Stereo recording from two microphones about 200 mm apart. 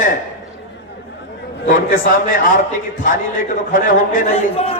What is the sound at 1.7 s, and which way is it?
Speech, 45° left (ahead or behind).